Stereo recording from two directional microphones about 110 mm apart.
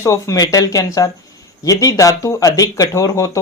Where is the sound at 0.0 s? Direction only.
25° left (ahead or behind).